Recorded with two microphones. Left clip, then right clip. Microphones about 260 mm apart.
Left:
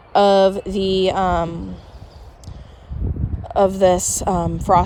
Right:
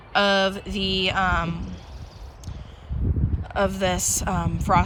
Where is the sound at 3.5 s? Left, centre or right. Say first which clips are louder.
Left 9 dB; centre.